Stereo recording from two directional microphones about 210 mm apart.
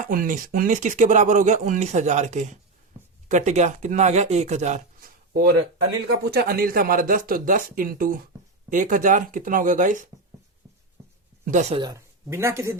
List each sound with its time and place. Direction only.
0.0 s speech: 40° right (ahead or behind)
11.5 s speech: 35° right (ahead or behind)
11.8 s speech: 15° right (ahead or behind)